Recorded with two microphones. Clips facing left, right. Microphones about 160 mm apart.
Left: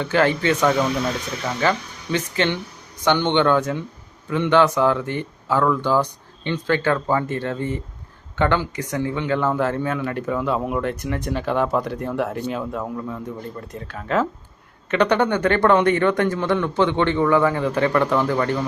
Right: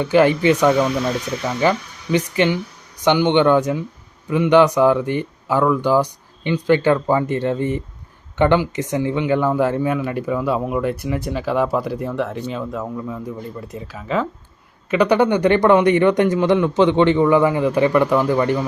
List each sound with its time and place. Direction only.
0.0 s speech: 15° right (ahead or behind)